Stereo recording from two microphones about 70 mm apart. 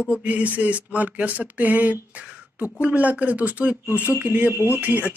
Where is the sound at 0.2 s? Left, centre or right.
Centre.